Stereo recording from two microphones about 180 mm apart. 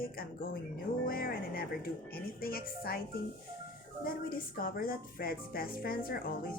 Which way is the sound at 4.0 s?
55° left (ahead or behind).